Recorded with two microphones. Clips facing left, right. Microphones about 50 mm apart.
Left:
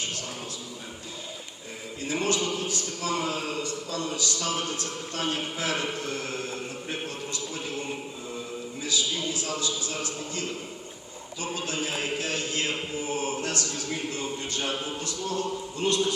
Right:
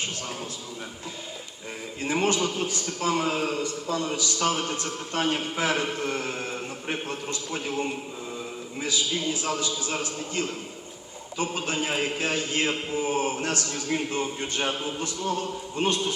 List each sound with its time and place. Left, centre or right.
2.0 s a man's voice: right